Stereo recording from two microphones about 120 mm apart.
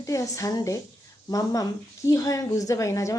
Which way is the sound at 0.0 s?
25° left (ahead or behind).